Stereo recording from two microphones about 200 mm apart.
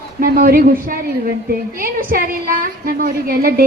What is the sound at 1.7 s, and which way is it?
A woman's voice, 45° right (ahead or behind).